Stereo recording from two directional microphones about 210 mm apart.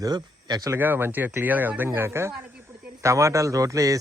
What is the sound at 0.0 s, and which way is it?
Speech, 20° right (ahead or behind).